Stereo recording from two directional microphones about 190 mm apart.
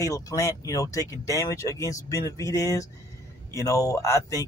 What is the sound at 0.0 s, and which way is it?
Speech, 20° left (ahead or behind).